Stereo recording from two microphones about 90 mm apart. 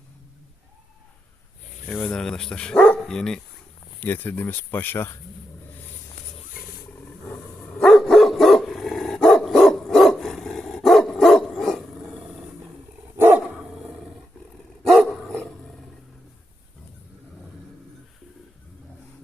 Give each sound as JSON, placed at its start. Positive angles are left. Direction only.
{"t": 1.9, "sound": "speech", "side_deg": 10}
{"t": 3.0, "sound": "speech", "side_deg": 5}
{"t": 4.0, "sound": "speech", "side_deg": 20}
{"t": 7.3, "sound": "dog", "side_deg": 10}
{"t": 13.1, "sound": "dog", "side_deg": -25}
{"t": 14.8, "sound": "dog", "side_deg": 5}